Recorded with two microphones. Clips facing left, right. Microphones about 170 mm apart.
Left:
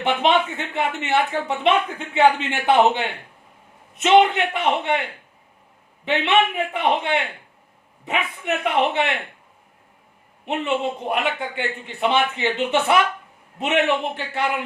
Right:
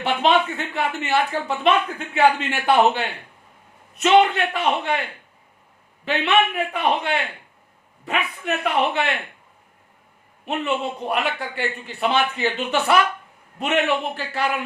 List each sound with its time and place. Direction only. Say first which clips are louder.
0.0 s a man's voice: even; 20° left (ahead or behind)
6.1 s a man's voice: left 1 dB; 20° left (ahead or behind)
10.4 s a man's voice: left 1 dB; 20° left (ahead or behind)